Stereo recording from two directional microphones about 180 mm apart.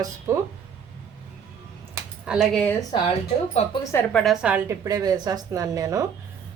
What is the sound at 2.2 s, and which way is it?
Speech, centre (ahead or behind).